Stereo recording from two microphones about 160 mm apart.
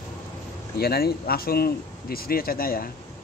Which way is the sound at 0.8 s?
75° left (ahead or behind).